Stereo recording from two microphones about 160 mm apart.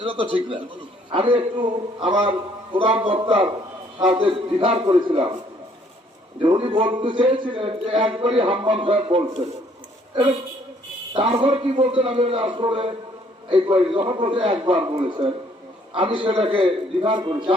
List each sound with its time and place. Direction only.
0.0 s a man's voice: 30° right (ahead or behind)
6.4 s a man's voice: 30° right (ahead or behind)
11.1 s a man's voice: 35° right (ahead or behind)